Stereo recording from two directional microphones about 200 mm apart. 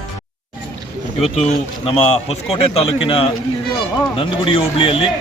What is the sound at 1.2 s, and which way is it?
Speech, 30° left (ahead or behind).